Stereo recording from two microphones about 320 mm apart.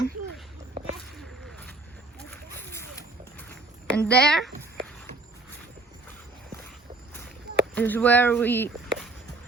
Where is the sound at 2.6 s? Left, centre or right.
Centre.